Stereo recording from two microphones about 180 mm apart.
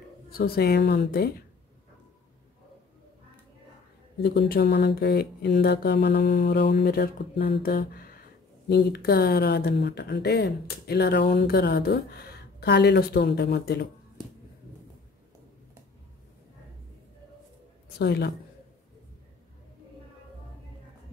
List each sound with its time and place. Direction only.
0.3 s speech: 60° left (ahead or behind)
4.2 s speech: 60° left (ahead or behind)
17.9 s speech: 65° left (ahead or behind)